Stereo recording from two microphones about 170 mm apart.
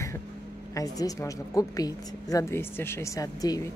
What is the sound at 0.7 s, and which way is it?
A woman's voice, 20° left (ahead or behind).